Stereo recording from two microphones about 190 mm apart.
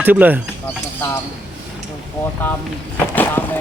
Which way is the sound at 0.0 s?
10° right (ahead or behind).